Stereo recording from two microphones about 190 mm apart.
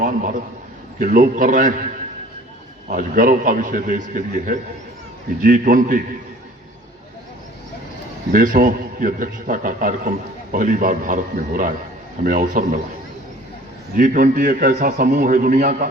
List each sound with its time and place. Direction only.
0.0 s a man's voice: 45° right (ahead or behind)
2.9 s a man's voice: 45° right (ahead or behind)
8.3 s a man's voice: 45° right (ahead or behind)
13.9 s a man's voice: 45° right (ahead or behind)